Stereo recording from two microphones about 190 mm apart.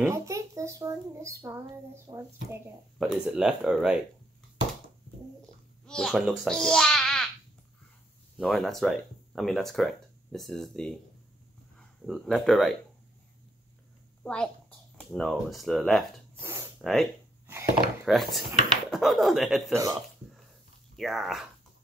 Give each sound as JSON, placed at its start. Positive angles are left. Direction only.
{"t": 0.0, "sound": "a sound", "side_deg": -15}
{"t": 2.1, "sound": "speech", "side_deg": -20}
{"t": 3.0, "sound": "speech", "side_deg": -5}
{"t": 5.9, "sound": "a child's voice", "side_deg": 0}
{"t": 8.4, "sound": "speech", "side_deg": 0}
{"t": 12.1, "sound": "speech", "side_deg": 0}
{"t": 14.2, "sound": "a child's voice", "side_deg": 5}
{"t": 16.4, "sound": "snort", "side_deg": -15}
{"t": 16.8, "sound": "speech", "side_deg": 0}
{"t": 19.7, "sound": "speech", "side_deg": -15}
{"t": 20.9, "sound": "speech", "side_deg": 0}